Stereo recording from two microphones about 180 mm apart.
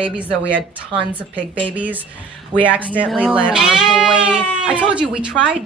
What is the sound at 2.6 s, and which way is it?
Speech, 10° right (ahead or behind).